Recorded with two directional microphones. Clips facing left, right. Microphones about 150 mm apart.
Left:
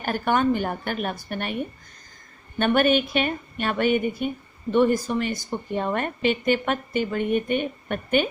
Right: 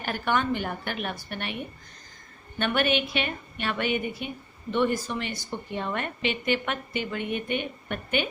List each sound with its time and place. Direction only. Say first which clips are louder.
0.0 s a woman's voice: left 5 dB; 45° left (ahead or behind)